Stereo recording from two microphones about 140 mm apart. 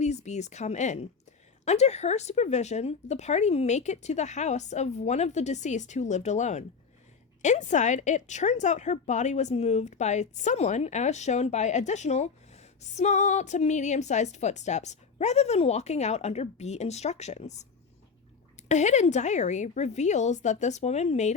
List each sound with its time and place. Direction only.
0.0 s a woman's voice: 55° left (ahead or behind)